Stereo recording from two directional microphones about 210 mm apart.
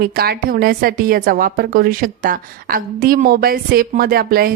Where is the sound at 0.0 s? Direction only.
45° right (ahead or behind).